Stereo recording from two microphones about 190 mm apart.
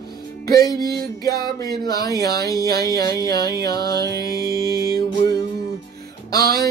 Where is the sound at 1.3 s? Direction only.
55° right (ahead or behind).